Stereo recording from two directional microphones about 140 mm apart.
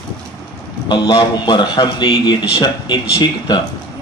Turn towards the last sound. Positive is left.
turn(degrees=30)  # may be behind; listen again after turning